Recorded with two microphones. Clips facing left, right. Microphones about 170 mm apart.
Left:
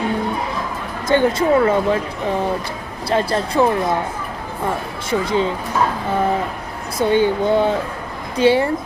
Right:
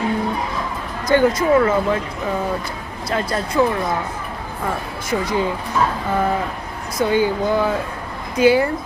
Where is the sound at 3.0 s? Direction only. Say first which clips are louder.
Left 4 dB; 30° left (ahead or behind).